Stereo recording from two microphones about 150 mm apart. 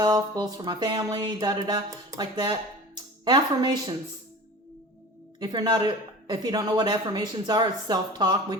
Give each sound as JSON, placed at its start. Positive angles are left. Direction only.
{"t": 0.0, "sound": "speech", "side_deg": -25}
{"t": 5.4, "sound": "speech", "side_deg": -30}